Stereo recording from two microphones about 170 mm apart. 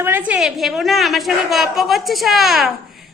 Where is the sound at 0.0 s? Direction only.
10° right (ahead or behind).